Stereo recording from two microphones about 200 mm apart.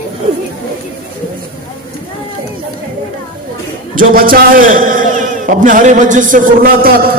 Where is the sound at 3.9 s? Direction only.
45° right (ahead or behind).